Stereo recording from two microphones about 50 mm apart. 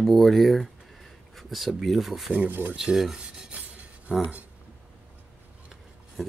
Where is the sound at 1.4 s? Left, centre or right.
Centre.